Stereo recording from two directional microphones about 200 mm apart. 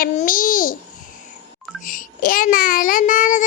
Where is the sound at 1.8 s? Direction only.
45° left (ahead or behind).